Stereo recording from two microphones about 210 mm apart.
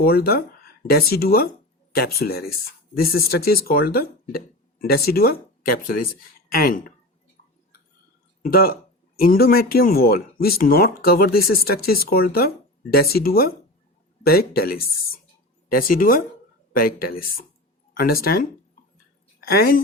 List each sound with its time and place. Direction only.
0.0 s speech: 45° left (ahead or behind)
8.4 s a woman's voice: 45° left (ahead or behind)